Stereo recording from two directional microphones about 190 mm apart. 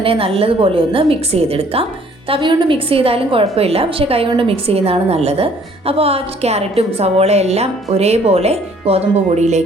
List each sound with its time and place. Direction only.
0.0 s a woman's voice: 30° right (ahead or behind)